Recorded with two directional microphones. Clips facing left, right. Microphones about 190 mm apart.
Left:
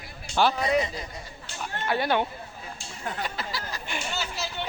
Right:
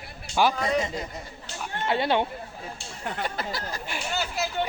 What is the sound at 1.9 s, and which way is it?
Speech, 25° right (ahead or behind).